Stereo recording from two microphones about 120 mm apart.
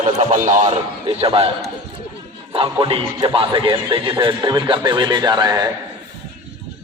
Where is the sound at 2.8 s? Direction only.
50° right (ahead or behind); by 5.7 s 35° right (ahead or behind).